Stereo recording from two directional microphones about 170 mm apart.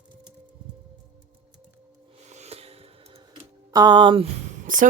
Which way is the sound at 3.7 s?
25° right (ahead or behind).